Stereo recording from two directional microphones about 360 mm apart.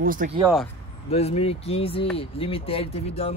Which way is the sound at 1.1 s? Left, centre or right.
Centre.